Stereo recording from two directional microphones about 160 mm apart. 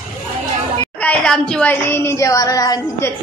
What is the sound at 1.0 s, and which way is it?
Speech, 5° left (ahead or behind).